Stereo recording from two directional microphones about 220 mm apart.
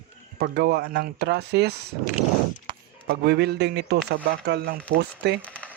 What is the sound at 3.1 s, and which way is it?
A man's voice, 45° right (ahead or behind).